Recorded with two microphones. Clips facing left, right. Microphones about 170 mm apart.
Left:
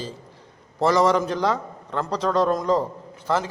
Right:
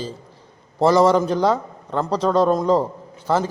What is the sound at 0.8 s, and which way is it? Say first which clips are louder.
A man's voice: right 4 dB; 30° right (ahead or behind).